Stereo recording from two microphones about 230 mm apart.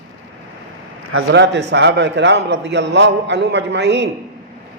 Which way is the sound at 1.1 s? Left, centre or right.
Right.